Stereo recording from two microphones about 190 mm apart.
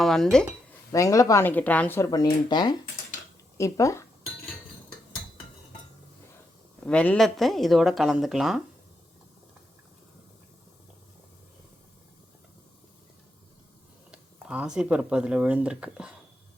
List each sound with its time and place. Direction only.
0.0 s speech: centre (ahead or behind)
0.9 s speech: 15° left (ahead or behind)
6.8 s speech: 5° left (ahead or behind)
14.1 s speech: 5° right (ahead or behind)